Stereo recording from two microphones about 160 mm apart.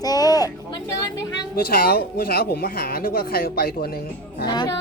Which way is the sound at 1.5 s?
65° left (ahead or behind).